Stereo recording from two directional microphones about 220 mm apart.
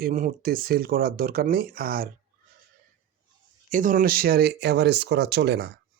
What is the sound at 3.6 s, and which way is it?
Speech, 35° right (ahead or behind).